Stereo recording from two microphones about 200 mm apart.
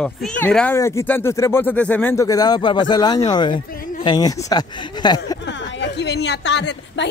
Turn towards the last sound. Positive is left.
turn(degrees=60)  # may be behind; listen again after turning